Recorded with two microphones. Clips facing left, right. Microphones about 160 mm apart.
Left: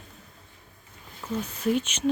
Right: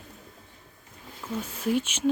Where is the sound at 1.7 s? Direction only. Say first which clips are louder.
Right 1 dB; 10° right (ahead or behind).